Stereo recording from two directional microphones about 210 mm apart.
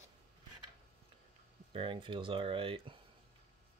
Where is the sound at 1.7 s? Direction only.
25° right (ahead or behind).